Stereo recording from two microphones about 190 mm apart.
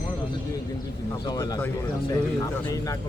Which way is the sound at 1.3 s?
20° left (ahead or behind).